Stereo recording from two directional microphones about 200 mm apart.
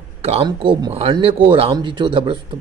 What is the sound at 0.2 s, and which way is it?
A man's voice, 30° right (ahead or behind).